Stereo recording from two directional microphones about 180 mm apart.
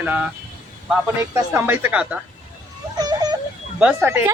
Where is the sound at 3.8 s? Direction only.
10° right (ahead or behind).